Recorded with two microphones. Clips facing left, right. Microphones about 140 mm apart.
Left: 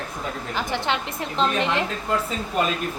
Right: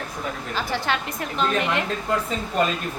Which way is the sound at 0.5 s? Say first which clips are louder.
Even; 20° left (ahead or behind).